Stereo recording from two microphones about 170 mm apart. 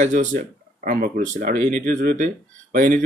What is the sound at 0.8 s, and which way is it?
Speech, 60° right (ahead or behind).